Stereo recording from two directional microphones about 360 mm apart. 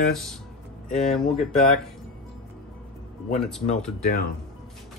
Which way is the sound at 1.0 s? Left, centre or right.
Centre.